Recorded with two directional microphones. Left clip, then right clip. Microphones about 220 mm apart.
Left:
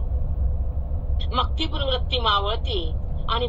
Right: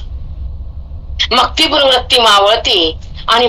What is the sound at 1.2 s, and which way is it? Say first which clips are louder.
A man's voice: right 16 dB; 50° right (ahead or behind).